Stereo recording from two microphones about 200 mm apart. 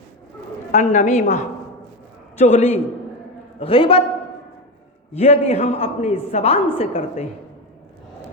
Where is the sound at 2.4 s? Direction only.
30° left (ahead or behind).